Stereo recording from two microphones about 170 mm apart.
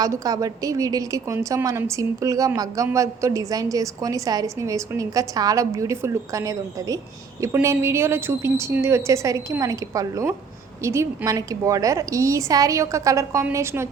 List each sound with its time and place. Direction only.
0.0 s a woman's voice: 20° right (ahead or behind)